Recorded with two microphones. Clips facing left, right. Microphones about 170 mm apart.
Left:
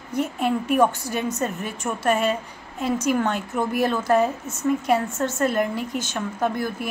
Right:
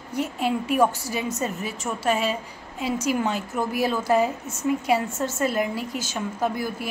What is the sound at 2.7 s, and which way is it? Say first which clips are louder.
Speech: left 2 dB; 50° left (ahead or behind).